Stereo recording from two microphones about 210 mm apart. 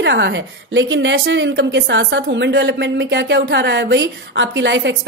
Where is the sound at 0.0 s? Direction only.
55° right (ahead or behind).